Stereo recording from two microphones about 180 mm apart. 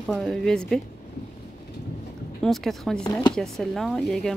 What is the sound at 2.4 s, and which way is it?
Speech, centre (ahead or behind).